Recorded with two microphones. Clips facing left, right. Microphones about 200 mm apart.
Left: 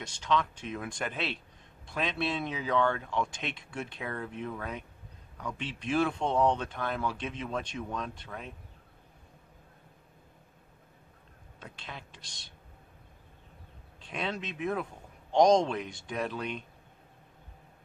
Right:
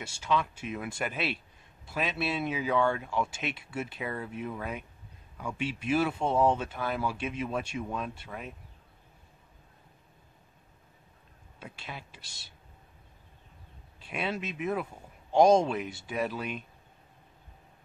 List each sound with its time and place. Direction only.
0.0 s speech: 10° right (ahead or behind)
11.6 s speech: 10° right (ahead or behind)
13.9 s speech: 5° right (ahead or behind)